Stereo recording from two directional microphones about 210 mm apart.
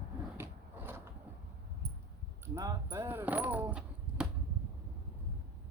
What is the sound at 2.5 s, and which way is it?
Speech, 15° right (ahead or behind).